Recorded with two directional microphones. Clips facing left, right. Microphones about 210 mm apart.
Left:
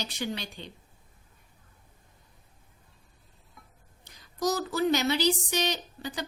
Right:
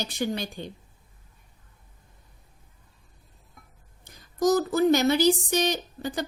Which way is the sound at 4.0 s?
50° right (ahead or behind).